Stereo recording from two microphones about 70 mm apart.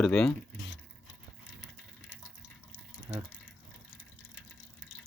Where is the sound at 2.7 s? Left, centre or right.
Right.